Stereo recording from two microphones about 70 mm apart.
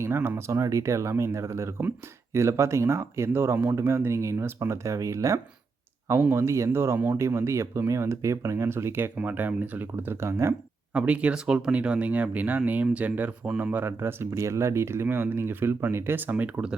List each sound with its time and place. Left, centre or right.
0.0 s speech: right
10.9 s speech: centre